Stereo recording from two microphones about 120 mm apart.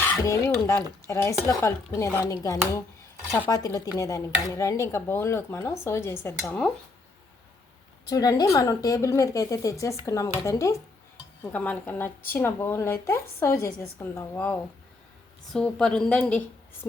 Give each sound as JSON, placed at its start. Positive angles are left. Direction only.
{"t": 0.0, "sound": "speech", "side_deg": 25}
{"t": 8.0, "sound": "speech", "side_deg": 30}
{"t": 11.4, "sound": "a woman's voice", "side_deg": 10}